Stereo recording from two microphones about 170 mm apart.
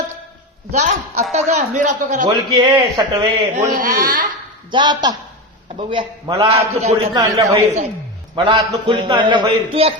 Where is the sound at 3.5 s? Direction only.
50° right (ahead or behind).